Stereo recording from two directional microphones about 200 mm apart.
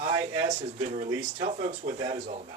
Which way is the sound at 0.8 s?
35° right (ahead or behind).